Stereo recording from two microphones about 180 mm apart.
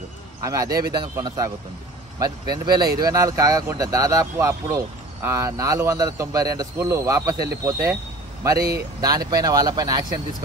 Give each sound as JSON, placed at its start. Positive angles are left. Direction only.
{"t": 0.4, "sound": "a man's voice", "side_deg": -20}
{"t": 0.7, "sound": "speech", "side_deg": -55}
{"t": 0.9, "sound": "speech", "side_deg": -20}
{"t": 9.0, "sound": "speech", "side_deg": -20}